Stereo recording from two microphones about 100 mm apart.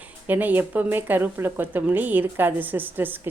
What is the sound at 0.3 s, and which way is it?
A woman's voice, 20° right (ahead or behind).